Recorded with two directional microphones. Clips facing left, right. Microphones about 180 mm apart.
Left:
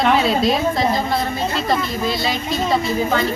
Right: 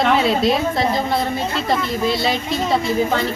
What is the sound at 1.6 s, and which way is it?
Speech, 25° right (ahead or behind).